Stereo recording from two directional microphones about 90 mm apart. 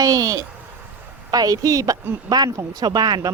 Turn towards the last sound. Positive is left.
turn(degrees=-50)  # may be behind; listen again after turning